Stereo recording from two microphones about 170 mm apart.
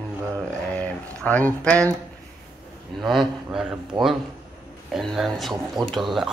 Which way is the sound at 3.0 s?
Centre (ahead or behind).